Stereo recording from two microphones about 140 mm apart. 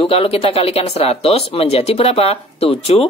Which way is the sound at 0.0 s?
40° left (ahead or behind).